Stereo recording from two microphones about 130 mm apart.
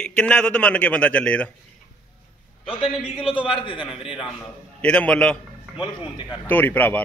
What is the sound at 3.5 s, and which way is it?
Speech, 40° left (ahead or behind).